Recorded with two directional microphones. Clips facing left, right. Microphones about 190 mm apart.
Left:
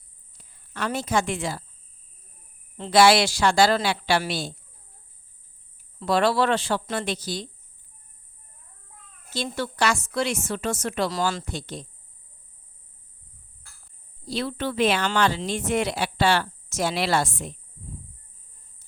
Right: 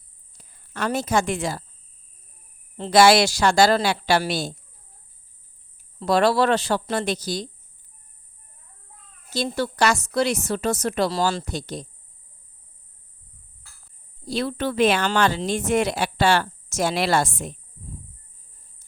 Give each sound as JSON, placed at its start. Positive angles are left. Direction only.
{"t": 0.3, "sound": "a woman's voice", "side_deg": -45}
{"t": 2.7, "sound": "speech", "side_deg": -40}
{"t": 6.0, "sound": "a woman's voice", "side_deg": -40}
{"t": 9.3, "sound": "a woman's voice", "side_deg": -40}
{"t": 14.3, "sound": "speech", "side_deg": -45}